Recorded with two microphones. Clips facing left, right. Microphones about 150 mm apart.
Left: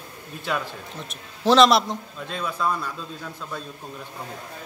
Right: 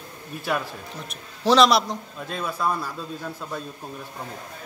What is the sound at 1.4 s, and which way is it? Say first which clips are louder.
A man's voice: left 1 dB; centre (ahead or behind).